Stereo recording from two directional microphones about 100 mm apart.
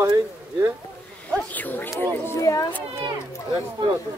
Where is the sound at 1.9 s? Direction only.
35° left (ahead or behind).